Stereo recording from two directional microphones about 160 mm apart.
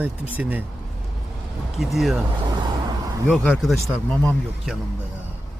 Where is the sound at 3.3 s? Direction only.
5° left (ahead or behind).